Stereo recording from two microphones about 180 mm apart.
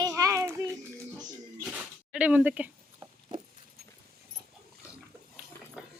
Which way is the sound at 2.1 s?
10° right (ahead or behind).